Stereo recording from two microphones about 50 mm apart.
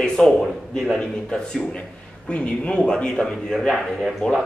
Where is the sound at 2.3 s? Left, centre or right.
Left.